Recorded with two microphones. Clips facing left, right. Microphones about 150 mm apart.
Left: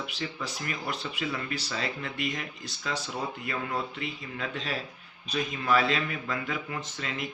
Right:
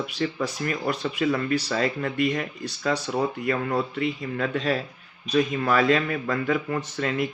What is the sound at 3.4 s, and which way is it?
Speech, 45° right (ahead or behind).